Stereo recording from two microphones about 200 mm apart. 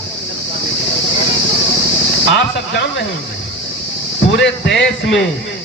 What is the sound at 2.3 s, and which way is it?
Speech, 60° left (ahead or behind).